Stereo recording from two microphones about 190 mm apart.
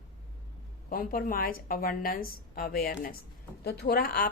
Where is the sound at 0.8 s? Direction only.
50° left (ahead or behind).